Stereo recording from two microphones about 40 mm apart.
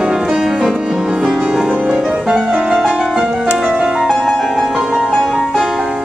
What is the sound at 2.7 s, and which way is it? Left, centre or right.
Music, centre.